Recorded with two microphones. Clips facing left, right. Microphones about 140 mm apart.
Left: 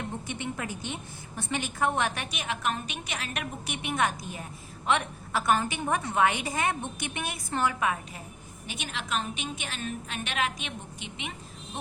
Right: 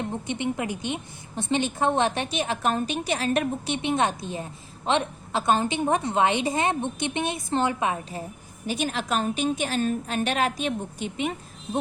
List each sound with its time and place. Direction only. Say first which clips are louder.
0.1 s a woman's voice: right 7 dB; 20° right (ahead or behind)
8.6 s a woman's voice: right 10 dB; 40° right (ahead or behind)